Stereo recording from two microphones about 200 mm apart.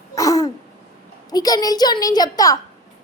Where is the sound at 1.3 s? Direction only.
20° left (ahead or behind).